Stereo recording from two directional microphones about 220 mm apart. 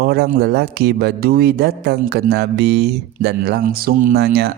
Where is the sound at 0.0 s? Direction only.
45° right (ahead or behind).